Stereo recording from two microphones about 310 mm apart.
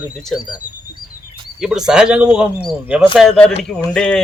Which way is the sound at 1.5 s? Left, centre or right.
Centre.